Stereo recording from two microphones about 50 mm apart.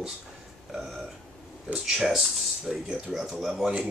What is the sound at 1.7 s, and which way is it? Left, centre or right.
Speech, centre.